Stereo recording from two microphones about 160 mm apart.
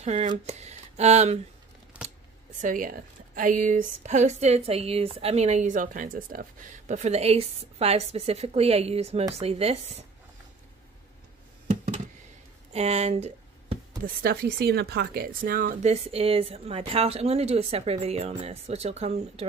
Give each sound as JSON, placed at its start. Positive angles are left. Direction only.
{"t": 0.0, "sound": "speech", "side_deg": -45}
{"t": 2.6, "sound": "speech", "side_deg": -55}
{"t": 6.9, "sound": "speech", "side_deg": -45}
{"t": 11.6, "sound": "a sound", "side_deg": -50}
{"t": 14.0, "sound": "speech", "side_deg": -70}